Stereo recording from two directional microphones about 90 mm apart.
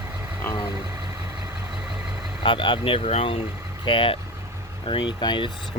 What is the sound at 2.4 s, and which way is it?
Speech, 70° left (ahead or behind).